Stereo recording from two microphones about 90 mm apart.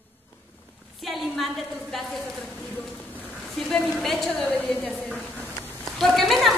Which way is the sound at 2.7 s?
20° left (ahead or behind).